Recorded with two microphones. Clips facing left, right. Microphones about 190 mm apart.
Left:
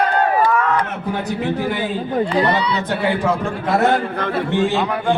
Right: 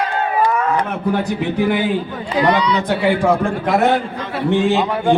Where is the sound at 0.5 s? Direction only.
25° right (ahead or behind).